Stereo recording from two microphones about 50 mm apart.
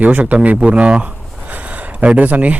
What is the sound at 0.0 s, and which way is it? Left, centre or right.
A man's voice, right.